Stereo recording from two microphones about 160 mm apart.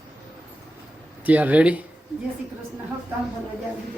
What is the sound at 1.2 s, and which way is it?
Speech, 10° right (ahead or behind).